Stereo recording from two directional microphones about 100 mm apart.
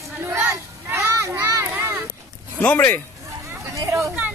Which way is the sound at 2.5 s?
20° left (ahead or behind).